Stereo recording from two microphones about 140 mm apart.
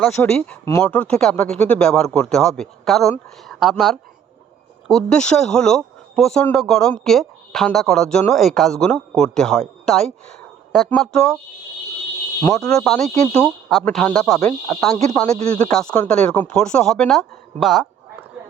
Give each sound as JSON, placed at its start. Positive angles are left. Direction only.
{"t": 0.2, "sound": "speech", "side_deg": 10}
{"t": 12.4, "sound": "speech", "side_deg": 20}
{"t": 12.6, "sound": "speech", "side_deg": 5}
{"t": 14.3, "sound": "speech", "side_deg": 20}
{"t": 15.7, "sound": "speech", "side_deg": 5}